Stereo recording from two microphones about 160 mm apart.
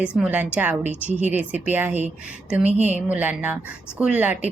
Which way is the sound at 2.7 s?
45° right (ahead or behind).